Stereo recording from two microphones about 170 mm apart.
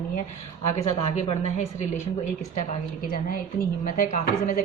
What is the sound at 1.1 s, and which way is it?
Speech, 40° left (ahead or behind).